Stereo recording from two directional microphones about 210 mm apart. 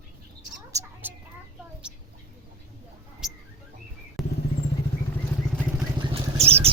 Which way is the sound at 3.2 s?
Centre (ahead or behind).